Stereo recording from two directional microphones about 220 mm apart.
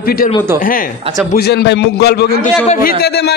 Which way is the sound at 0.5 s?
40° left (ahead or behind).